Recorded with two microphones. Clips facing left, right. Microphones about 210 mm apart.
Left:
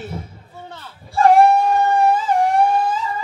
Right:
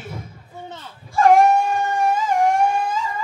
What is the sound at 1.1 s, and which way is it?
Dog, 35° left (ahead or behind).